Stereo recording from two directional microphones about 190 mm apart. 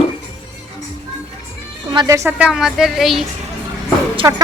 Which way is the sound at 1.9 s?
20° right (ahead or behind).